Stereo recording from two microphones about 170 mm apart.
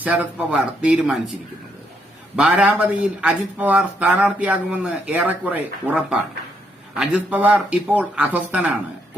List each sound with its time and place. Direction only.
0.0 s speech: 10° right (ahead or behind)
2.3 s speech: 5° right (ahead or behind)